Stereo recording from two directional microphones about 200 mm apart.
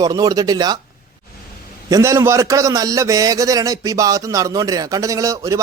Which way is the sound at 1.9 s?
15° right (ahead or behind).